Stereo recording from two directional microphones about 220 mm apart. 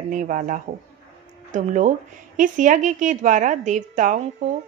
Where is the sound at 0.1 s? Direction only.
35° right (ahead or behind).